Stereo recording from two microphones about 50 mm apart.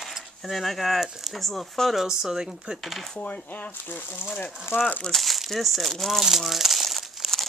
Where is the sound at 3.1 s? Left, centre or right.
Left.